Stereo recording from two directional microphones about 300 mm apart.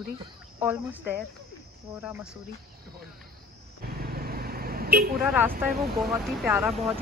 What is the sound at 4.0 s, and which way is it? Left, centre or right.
Vehicle, right.